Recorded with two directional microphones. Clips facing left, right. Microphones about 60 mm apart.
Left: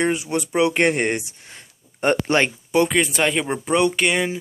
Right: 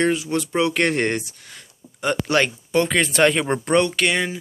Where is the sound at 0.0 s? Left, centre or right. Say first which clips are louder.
Right 1 dB; left.